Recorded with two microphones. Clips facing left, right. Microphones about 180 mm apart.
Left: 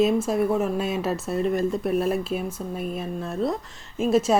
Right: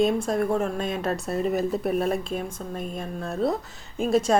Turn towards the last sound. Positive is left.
turn(degrees=0)  # may be behind; listen again after turning